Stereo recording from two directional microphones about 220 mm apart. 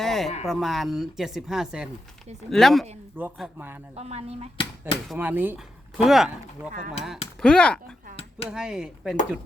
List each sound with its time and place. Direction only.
0.0 s a sound: centre (ahead or behind)
0.4 s speech: centre (ahead or behind)
3.9 s speech: 30° right (ahead or behind)
5.0 s speech: 10° right (ahead or behind)
7.4 s speech: 5° left (ahead or behind)